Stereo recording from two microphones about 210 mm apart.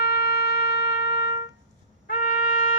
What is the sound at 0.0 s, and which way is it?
Wind instrument, 50° left (ahead or behind).